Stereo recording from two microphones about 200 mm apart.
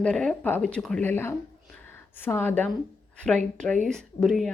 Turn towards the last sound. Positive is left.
turn(degrees=0)  # may be behind; listen again after turning